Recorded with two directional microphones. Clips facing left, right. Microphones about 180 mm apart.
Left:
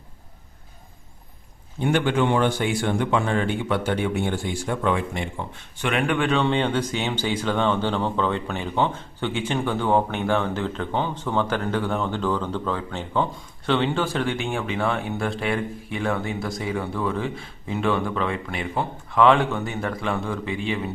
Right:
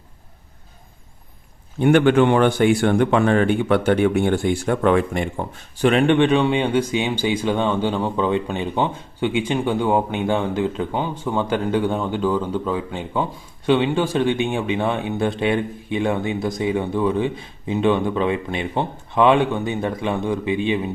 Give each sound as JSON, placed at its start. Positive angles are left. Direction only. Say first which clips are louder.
{"t": 1.8, "sound": "speech", "louder": "right 7 dB", "side_deg": -60}